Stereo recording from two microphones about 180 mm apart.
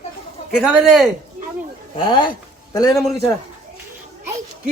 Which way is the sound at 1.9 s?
25° left (ahead or behind).